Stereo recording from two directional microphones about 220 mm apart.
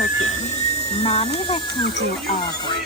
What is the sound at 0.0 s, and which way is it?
Speech, 30° left (ahead or behind).